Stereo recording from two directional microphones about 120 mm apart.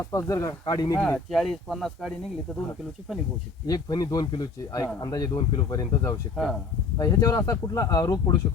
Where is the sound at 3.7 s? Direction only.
35° left (ahead or behind).